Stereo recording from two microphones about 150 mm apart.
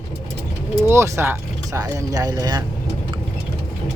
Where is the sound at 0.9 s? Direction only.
20° right (ahead or behind).